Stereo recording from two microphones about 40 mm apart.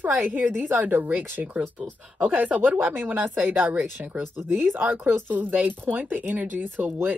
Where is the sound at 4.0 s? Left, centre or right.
Right.